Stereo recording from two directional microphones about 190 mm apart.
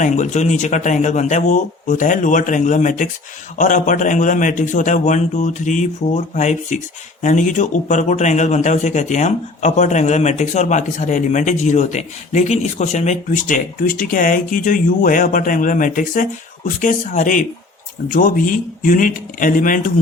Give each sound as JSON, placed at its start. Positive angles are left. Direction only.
{"t": 0.0, "sound": "a man's voice", "side_deg": 40}